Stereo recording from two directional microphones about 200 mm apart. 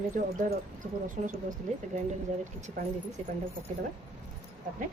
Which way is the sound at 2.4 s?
35° right (ahead or behind).